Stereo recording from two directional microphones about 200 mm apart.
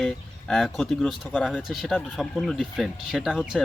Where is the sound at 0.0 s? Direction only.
Centre (ahead or behind).